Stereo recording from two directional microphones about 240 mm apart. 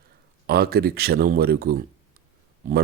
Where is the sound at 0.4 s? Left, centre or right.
Right.